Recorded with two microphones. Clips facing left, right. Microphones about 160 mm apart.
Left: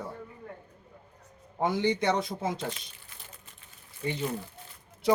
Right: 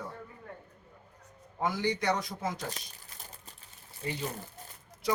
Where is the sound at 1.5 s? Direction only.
25° left (ahead or behind).